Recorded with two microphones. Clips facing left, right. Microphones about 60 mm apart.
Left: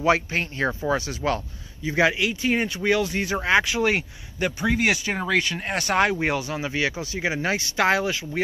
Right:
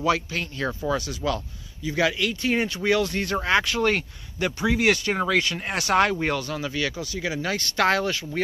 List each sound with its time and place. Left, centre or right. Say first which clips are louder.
0.0 s a man's voice: left 3 dB; left
2.2 s speech: left 1 dB; centre; by 7.5 s left
7.5 s speech: right 1 dB; centre